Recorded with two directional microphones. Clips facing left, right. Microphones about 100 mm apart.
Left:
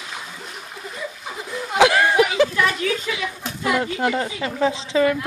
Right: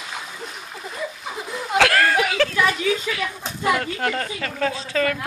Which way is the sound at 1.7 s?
15° left (ahead or behind).